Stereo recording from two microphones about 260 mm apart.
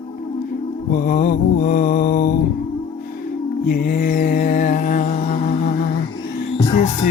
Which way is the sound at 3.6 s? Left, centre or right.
Left.